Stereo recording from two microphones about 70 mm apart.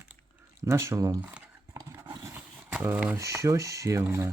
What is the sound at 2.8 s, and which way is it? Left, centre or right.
Speech, right.